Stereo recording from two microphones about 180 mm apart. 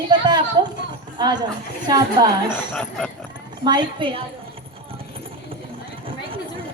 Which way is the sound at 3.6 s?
25° right (ahead or behind).